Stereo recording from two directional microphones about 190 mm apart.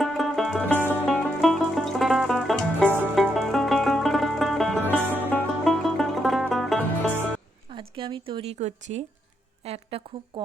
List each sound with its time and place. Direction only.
0.0 s music: centre (ahead or behind)
7.7 s a sound: 30° right (ahead or behind)
9.6 s a woman's voice: 30° right (ahead or behind)